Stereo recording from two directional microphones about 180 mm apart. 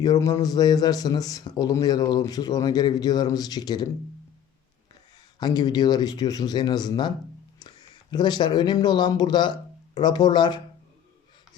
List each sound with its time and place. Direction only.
0.0 s a man's voice: 20° left (ahead or behind)
5.4 s a man's voice: 20° left (ahead or behind)